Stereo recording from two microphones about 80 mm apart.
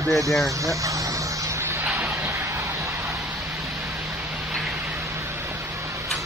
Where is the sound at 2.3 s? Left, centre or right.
Right.